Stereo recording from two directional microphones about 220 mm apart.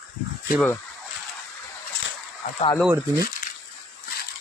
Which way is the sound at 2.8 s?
10° right (ahead or behind).